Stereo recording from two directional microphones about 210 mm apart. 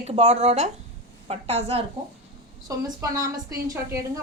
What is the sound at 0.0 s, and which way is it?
A woman's voice, 30° right (ahead or behind).